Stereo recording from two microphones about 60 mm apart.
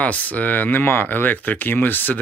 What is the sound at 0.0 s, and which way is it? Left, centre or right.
Speech, left.